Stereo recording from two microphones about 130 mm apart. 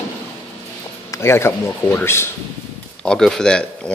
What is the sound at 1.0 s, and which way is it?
Speech, 20° left (ahead or behind).